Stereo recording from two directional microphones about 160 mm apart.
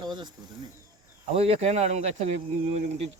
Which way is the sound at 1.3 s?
40° right (ahead or behind).